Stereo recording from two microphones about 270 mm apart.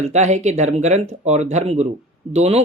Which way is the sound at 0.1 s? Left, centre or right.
Right.